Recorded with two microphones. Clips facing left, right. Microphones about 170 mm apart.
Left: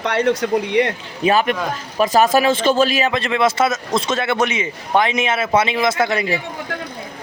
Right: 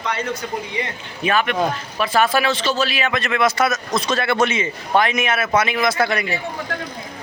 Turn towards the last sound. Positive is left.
turn(degrees=20)  # may be behind; listen again after turning